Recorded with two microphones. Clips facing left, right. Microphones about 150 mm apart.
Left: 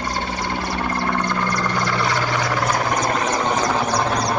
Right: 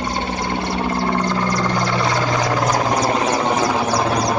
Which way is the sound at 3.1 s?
30° right (ahead or behind).